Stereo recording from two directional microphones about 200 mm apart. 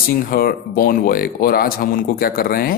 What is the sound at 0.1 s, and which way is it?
Speech, 45° left (ahead or behind).